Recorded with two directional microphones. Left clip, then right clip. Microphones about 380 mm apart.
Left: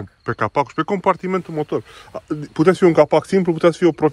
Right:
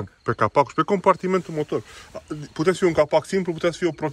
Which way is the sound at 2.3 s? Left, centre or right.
Left.